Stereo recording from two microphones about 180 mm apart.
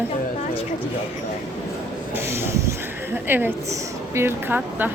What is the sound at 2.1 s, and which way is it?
A woman's voice, 15° right (ahead or behind).